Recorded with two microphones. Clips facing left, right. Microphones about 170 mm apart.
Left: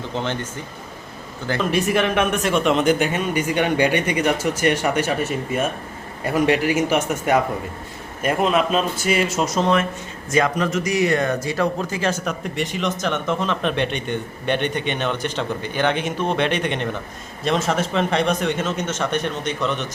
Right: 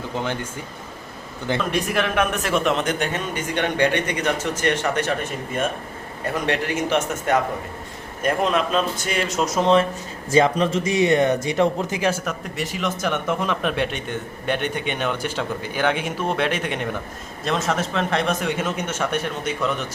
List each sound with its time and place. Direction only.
1.5 s speech: centre (ahead or behind)
10.6 s speech: 30° right (ahead or behind)
12.2 s speech: 5° right (ahead or behind)